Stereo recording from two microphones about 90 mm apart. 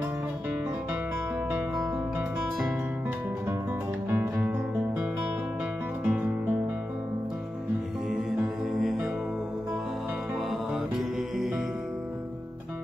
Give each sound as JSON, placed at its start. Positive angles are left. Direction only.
{"t": 4.1, "sound": "music", "side_deg": -25}
{"t": 6.0, "sound": "music", "side_deg": -20}
{"t": 8.7, "sound": "music", "side_deg": -5}
{"t": 10.7, "sound": "music", "side_deg": -5}